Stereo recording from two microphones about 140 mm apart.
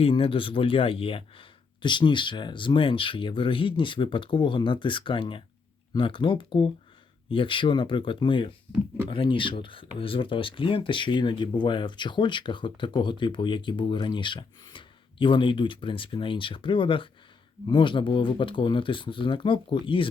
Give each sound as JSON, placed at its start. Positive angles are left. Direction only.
{"t": 0.0, "sound": "speech", "side_deg": 40}